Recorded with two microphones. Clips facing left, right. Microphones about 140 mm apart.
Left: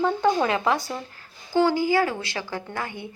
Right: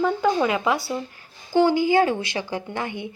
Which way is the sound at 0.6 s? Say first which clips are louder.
Right 1 dB; 10° right (ahead or behind).